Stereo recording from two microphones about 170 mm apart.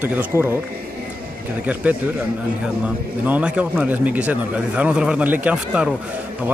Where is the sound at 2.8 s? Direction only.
10° right (ahead or behind).